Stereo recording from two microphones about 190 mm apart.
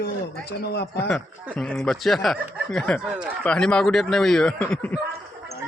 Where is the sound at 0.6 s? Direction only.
60° left (ahead or behind).